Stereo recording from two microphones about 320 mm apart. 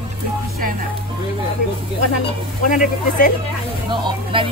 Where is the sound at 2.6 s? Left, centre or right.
Left.